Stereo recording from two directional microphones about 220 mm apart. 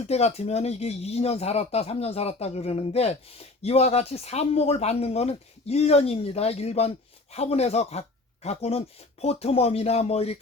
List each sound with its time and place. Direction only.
0.1 s speech: 30° left (ahead or behind)